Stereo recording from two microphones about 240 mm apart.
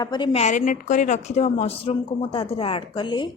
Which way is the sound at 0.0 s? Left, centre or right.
Centre.